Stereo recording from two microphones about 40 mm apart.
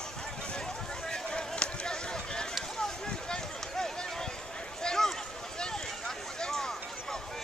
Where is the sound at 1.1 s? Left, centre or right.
Centre.